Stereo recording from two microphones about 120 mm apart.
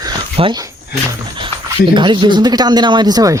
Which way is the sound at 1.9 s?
40° right (ahead or behind).